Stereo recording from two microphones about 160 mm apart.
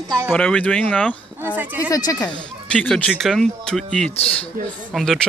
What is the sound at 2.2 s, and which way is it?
Speech, 5° left (ahead or behind).